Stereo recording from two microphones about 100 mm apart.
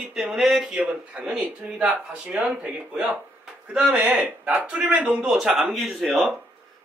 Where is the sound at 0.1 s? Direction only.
5° right (ahead or behind).